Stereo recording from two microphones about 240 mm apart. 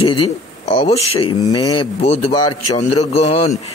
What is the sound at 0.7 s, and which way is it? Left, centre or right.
Speech, left.